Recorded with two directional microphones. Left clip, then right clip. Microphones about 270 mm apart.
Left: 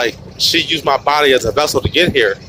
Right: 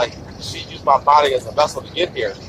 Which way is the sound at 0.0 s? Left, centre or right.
Left.